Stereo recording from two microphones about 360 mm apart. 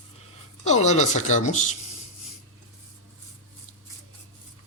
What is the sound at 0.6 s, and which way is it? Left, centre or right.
A man's voice, centre.